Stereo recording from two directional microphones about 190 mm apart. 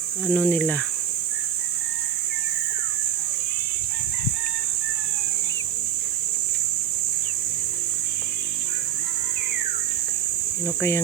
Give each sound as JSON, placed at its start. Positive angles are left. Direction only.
{"t": 0.3, "sound": "speech", "side_deg": 5}
{"t": 10.8, "sound": "speech", "side_deg": 10}